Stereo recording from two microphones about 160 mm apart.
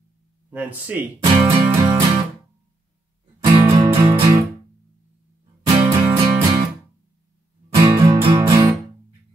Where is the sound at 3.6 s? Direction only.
15° right (ahead or behind).